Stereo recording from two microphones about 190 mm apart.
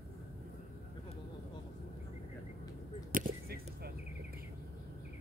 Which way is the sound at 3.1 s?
50° right (ahead or behind).